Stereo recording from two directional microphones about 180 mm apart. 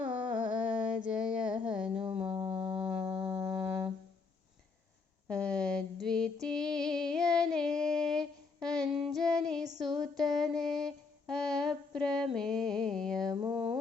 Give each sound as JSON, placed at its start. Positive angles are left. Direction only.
{"t": 0.5, "sound": "female singing", "side_deg": -5}
{"t": 1.6, "sound": "a sound", "side_deg": -5}
{"t": 2.0, "sound": "mantra", "side_deg": -30}
{"t": 2.9, "sound": "music", "side_deg": -10}
{"t": 5.3, "sound": "female singing", "side_deg": 5}
{"t": 9.8, "sound": "music", "side_deg": 0}
{"t": 13.2, "sound": "mantra", "side_deg": -20}